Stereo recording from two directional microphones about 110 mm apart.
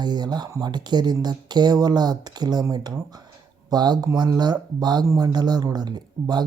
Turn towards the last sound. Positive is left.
turn(degrees=-40)  # may be behind; listen again after turning